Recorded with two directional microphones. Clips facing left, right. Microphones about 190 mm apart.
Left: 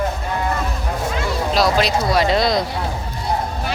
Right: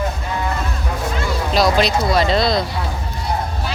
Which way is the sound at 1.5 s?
5° left (ahead or behind).